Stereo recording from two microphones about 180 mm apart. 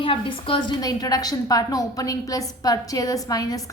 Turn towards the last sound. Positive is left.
turn(degrees=20)  # may be behind; listen again after turning